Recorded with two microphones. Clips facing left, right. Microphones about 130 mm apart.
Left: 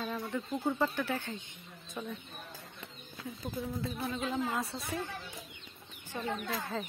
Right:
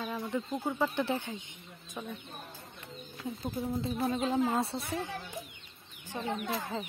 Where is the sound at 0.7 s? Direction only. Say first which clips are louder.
Even; 10° right (ahead or behind).